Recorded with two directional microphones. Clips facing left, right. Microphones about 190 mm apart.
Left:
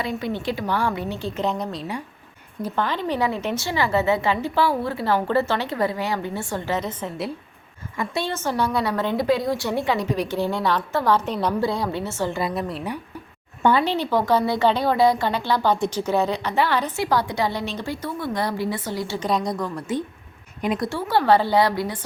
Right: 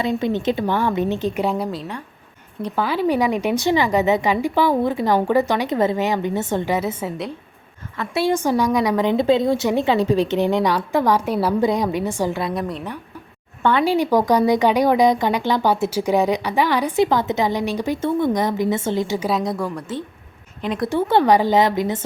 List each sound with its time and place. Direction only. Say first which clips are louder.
0.0 s a woman's voice: right 6 dB; 20° right (ahead or behind)
6.7 s speech: right 4 dB; 10° right (ahead or behind)
8.1 s speech: right 8 dB; 10° right (ahead or behind)
12.3 s a woman's voice: right 2 dB; centre (ahead or behind)
13.8 s speech: right 5 dB; 10° right (ahead or behind)
19.3 s a woman's voice: right 2 dB; centre (ahead or behind)
20.6 s speech: left 1 dB; 10° left (ahead or behind)
20.9 s a woman's voice: right 4 dB; 20° right (ahead or behind)